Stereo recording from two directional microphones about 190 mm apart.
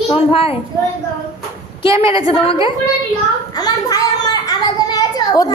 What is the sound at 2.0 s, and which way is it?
Speech, 25° left (ahead or behind).